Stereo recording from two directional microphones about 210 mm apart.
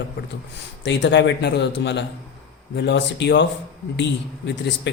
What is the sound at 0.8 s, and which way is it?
Speech, 55° left (ahead or behind).